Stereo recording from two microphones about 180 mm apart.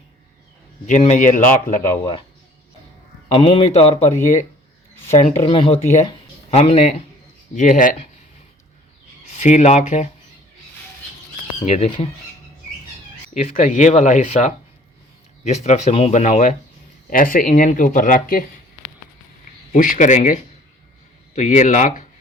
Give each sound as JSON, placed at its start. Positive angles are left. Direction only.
{"t": 0.9, "sound": "speech", "side_deg": 40}
{"t": 3.2, "sound": "speech", "side_deg": 30}
{"t": 7.5, "sound": "speech", "side_deg": 45}
{"t": 9.2, "sound": "speech", "side_deg": 40}
{"t": 11.6, "sound": "speech", "side_deg": 35}
{"t": 13.3, "sound": "speech", "side_deg": 35}
{"t": 17.1, "sound": "speech", "side_deg": 50}
{"t": 19.7, "sound": "speech", "side_deg": 50}